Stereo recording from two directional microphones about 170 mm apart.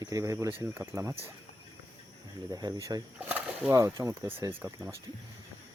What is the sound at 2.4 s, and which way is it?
Speech, 20° right (ahead or behind).